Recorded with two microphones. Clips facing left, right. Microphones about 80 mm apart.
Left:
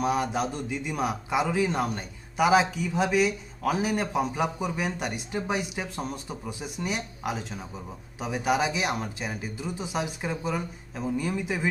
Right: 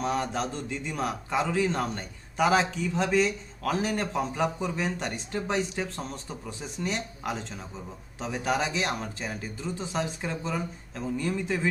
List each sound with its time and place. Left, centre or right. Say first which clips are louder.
0.0 s a man's voice: left 2 dB; centre